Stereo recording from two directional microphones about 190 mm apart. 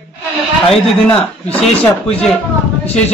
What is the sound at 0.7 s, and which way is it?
Speech, 5° left (ahead or behind).